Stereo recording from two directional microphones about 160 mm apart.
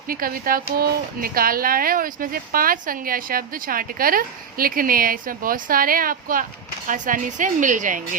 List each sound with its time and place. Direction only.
0.1 s a woman's voice: 65° right (ahead or behind)